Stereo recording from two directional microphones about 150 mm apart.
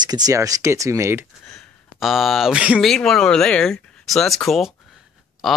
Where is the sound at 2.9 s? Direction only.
5° left (ahead or behind).